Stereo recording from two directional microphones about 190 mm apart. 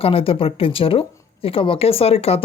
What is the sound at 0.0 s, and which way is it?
Speech, 30° left (ahead or behind).